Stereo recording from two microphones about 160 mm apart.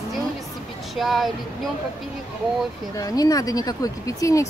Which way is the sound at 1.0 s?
Centre (ahead or behind).